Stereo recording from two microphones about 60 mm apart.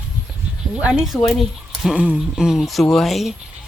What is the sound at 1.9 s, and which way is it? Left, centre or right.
Speech, centre.